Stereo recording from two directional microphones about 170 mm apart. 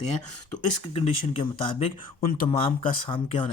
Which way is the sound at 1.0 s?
35° left (ahead or behind).